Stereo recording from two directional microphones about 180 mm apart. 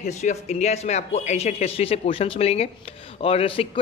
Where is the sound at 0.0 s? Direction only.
40° left (ahead or behind).